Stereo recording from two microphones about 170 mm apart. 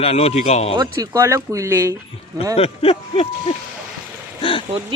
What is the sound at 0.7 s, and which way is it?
Speech, 20° right (ahead or behind).